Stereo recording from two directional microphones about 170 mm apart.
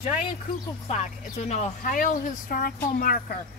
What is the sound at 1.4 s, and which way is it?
Speech, 45° left (ahead or behind).